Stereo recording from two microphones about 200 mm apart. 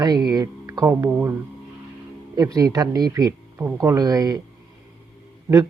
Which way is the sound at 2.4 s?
15° right (ahead or behind).